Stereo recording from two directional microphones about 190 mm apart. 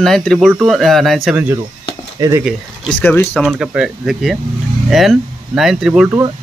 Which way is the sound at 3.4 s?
5° right (ahead or behind).